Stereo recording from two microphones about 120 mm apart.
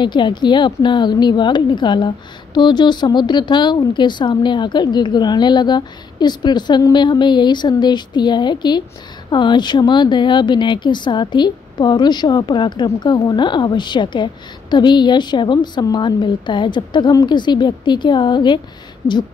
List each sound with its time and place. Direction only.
0.0 s a woman's voice: 40° left (ahead or behind)